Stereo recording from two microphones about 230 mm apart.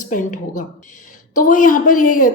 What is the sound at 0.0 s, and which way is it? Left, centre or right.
A woman's voice, left.